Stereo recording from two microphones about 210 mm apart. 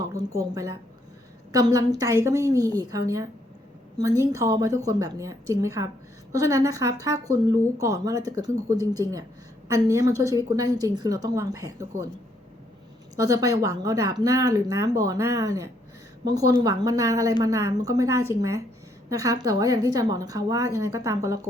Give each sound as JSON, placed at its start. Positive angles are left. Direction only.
{"t": 0.0, "sound": "a woman's voice", "side_deg": -15}
{"t": 13.1, "sound": "speech", "side_deg": -15}